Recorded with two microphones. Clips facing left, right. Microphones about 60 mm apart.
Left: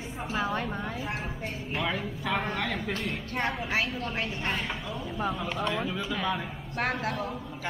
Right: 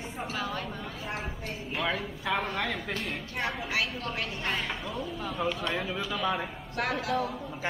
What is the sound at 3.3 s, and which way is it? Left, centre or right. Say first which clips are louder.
A woman's voice: left 2 dB; left.